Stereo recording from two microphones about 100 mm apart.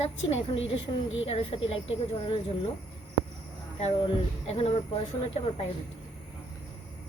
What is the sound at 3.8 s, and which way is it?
Speech, 75° left (ahead or behind).